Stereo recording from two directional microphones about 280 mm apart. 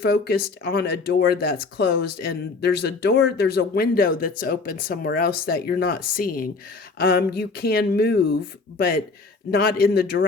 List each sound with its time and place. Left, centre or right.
0.0 s speech: left
9.5 s speech: left